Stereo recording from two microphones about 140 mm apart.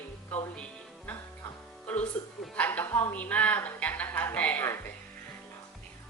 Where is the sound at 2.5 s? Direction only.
10° left (ahead or behind).